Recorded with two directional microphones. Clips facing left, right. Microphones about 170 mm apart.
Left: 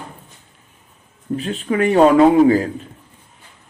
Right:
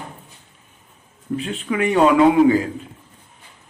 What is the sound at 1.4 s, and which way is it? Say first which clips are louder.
A man's voice: left 3 dB; 40° left (ahead or behind).